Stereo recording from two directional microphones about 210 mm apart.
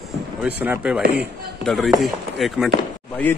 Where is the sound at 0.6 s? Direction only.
5° right (ahead or behind).